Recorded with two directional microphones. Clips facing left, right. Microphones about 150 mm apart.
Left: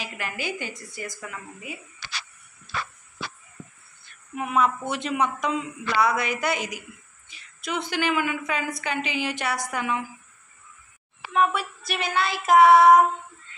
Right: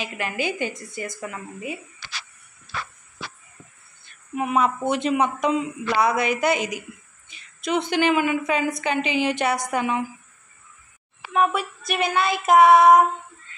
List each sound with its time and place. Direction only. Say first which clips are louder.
0.0 s a woman's voice: right 5 dB; 20° right (ahead or behind)
4.4 s a woman's voice: right 2 dB; 20° right (ahead or behind)
11.3 s child singing: right 2 dB; 15° right (ahead or behind)